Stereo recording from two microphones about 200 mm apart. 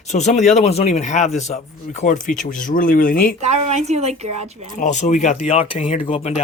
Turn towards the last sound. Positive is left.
turn(degrees=30)  # may be behind; listen again after turning